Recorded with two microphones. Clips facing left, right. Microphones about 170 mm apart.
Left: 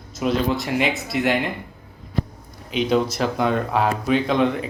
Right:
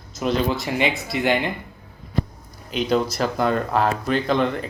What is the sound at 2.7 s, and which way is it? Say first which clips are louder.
Speech: left 1 dB; centre (ahead or behind).